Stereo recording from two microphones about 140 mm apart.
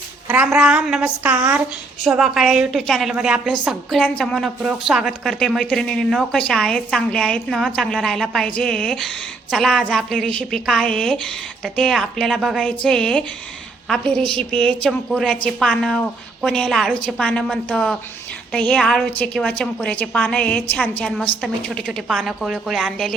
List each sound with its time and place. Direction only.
0.3 s a woman's voice: 10° right (ahead or behind)